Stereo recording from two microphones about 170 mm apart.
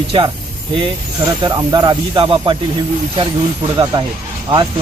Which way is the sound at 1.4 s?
25° right (ahead or behind).